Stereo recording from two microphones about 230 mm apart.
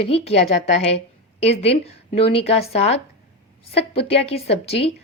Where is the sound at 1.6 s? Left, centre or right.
Left.